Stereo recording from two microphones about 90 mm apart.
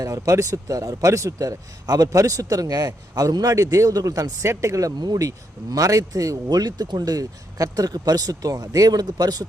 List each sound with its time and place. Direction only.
0.0 s a man's voice: 40° right (ahead or behind)